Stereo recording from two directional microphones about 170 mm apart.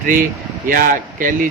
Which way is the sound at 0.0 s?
55° right (ahead or behind).